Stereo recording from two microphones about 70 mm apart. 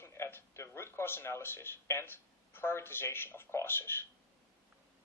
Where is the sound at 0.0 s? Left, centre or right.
Left.